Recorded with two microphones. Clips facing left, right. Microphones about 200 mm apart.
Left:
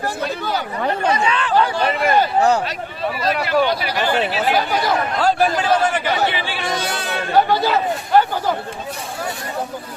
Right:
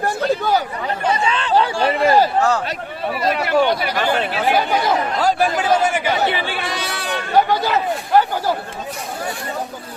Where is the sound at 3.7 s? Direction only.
50° right (ahead or behind).